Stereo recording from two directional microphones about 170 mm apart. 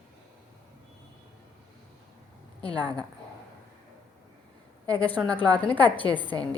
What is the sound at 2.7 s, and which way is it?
Speech, 25° right (ahead or behind).